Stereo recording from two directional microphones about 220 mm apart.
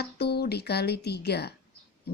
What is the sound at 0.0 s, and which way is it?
Speech, 45° left (ahead or behind).